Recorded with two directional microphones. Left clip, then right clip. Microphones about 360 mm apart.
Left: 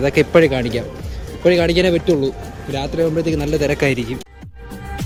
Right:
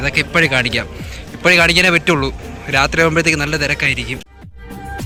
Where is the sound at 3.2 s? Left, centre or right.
Centre.